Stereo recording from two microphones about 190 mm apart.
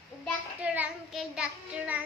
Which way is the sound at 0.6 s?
5° right (ahead or behind).